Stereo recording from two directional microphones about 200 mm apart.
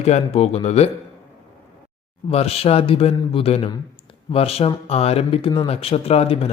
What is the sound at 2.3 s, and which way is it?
Speech, 30° left (ahead or behind).